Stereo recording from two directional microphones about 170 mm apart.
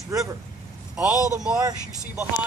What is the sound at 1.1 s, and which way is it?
Speech, 20° left (ahead or behind).